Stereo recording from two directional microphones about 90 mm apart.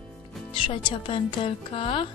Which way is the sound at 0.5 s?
65° left (ahead or behind).